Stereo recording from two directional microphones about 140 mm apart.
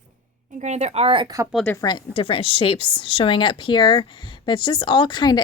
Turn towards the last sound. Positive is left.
turn(degrees=30)  # may be behind; listen again after turning